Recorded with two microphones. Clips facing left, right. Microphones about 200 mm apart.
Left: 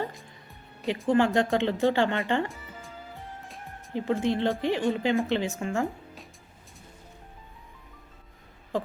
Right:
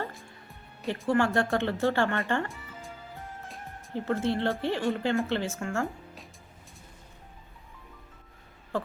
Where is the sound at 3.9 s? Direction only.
15° left (ahead or behind).